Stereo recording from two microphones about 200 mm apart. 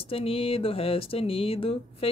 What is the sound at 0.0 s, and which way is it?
Speech, 30° left (ahead or behind).